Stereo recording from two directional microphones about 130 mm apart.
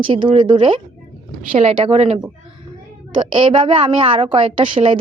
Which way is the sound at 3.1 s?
40° right (ahead or behind).